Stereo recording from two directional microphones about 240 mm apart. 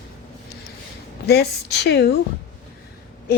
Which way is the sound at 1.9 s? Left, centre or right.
Left.